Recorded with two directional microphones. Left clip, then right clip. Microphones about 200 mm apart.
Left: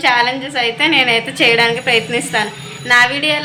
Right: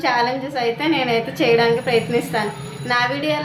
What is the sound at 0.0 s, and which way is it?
A woman's voice, centre (ahead or behind).